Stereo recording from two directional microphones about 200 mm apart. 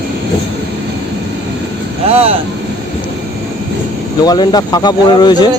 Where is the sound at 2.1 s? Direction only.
30° right (ahead or behind).